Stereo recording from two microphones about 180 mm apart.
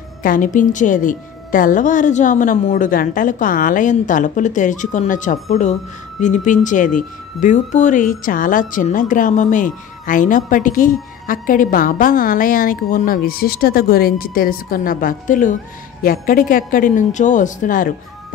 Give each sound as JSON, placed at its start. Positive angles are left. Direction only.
{"t": 0.2, "sound": "a woman's voice", "side_deg": 50}